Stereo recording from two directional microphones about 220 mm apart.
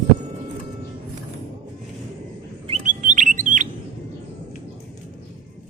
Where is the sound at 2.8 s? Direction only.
35° right (ahead or behind).